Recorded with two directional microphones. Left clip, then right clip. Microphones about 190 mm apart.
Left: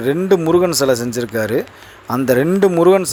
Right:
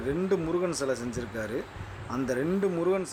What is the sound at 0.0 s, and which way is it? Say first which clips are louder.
Speech: left 14 dB; 45° left (ahead or behind).